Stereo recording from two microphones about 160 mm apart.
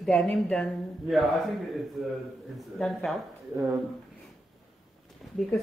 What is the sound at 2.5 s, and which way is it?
Speech, centre (ahead or behind).